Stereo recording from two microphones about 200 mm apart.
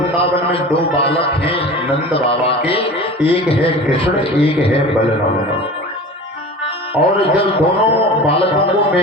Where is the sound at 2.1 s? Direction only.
30° left (ahead or behind).